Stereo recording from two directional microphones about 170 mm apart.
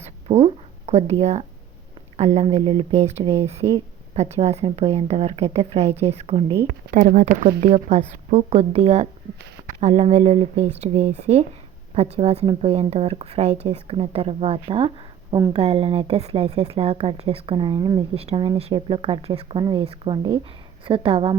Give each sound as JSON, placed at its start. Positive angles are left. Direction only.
{"t": 0.0, "sound": "a sound", "side_deg": -35}
{"t": 2.1, "sound": "speech", "side_deg": -40}
{"t": 6.9, "sound": "speech", "side_deg": -55}